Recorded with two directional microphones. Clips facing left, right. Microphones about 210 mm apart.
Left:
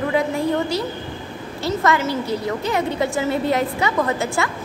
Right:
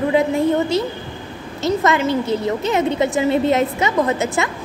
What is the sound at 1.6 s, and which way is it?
A woman's voice, 20° right (ahead or behind).